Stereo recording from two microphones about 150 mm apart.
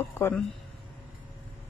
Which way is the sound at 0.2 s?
5° left (ahead or behind).